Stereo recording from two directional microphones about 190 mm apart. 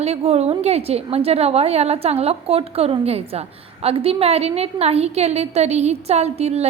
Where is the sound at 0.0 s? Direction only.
35° right (ahead or behind).